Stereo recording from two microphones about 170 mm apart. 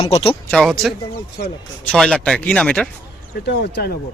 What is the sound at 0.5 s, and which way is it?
A man's voice, centre (ahead or behind).